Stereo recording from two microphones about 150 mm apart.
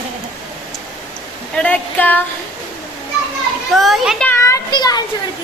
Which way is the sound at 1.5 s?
10° left (ahead or behind).